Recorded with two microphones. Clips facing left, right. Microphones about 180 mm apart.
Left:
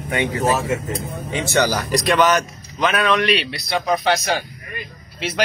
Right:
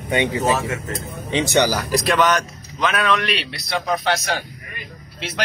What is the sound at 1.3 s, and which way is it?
Speech, 15° right (ahead or behind).